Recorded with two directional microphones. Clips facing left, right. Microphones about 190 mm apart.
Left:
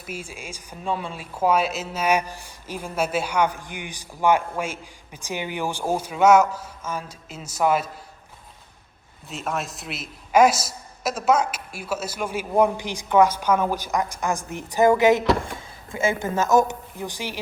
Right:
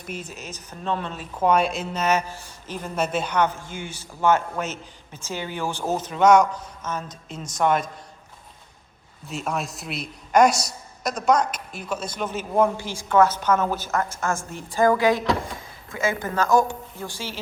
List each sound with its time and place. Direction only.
0.0 s speech: 10° left (ahead or behind)
9.2 s a woman's voice: centre (ahead or behind); by 17.4 s 15° left (ahead or behind)